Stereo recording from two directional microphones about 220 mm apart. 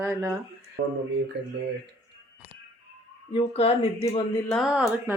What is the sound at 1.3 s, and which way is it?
Speech, 50° right (ahead or behind).